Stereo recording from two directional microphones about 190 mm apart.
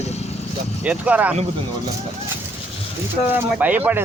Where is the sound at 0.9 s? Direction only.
5° right (ahead or behind).